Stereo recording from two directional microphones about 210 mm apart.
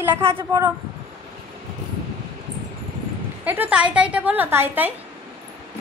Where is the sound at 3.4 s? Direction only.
10° right (ahead or behind).